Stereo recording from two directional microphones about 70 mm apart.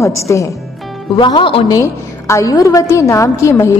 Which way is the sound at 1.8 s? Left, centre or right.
Left.